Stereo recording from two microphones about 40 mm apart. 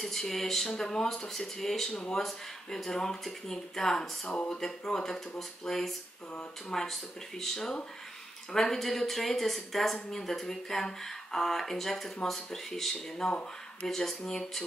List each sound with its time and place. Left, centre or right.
0.0 s speech: centre
8.7 s a woman's voice: centre